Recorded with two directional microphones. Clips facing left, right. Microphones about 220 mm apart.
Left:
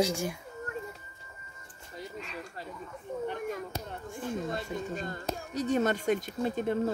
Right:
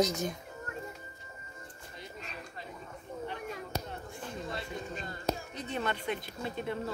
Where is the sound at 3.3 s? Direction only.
50° left (ahead or behind).